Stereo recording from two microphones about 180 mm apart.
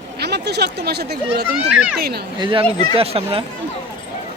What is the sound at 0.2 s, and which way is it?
Speech, 65° right (ahead or behind).